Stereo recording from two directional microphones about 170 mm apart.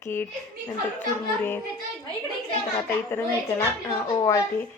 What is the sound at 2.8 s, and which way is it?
Speech, 15° left (ahead or behind).